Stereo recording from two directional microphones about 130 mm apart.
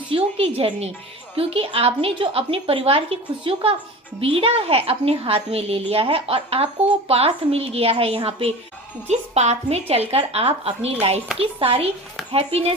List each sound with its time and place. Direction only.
0.1 s a woman's voice: 45° right (ahead or behind)